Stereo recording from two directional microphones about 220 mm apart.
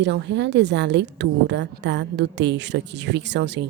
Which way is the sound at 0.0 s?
50° right (ahead or behind).